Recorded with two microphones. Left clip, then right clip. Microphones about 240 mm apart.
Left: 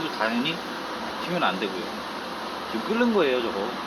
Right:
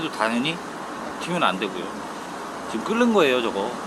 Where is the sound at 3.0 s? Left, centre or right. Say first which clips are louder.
Right 4 dB; centre.